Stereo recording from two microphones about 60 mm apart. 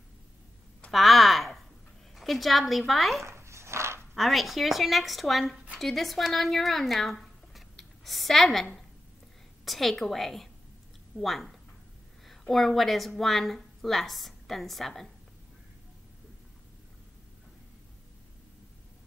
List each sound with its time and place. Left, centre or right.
0.9 s a sound: centre
2.1 s a woman's voice: centre
3.2 s dog: right
4.1 s a woman's voice: centre
9.7 s a woman's voice: centre